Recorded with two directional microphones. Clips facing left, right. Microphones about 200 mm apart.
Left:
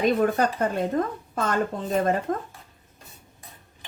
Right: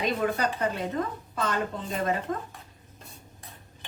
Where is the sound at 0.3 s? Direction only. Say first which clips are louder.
Left 4 dB; 50° left (ahead or behind).